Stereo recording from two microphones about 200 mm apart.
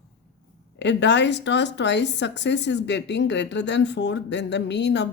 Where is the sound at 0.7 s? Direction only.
60° left (ahead or behind).